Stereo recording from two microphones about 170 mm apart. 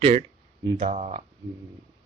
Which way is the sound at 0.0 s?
35° right (ahead or behind).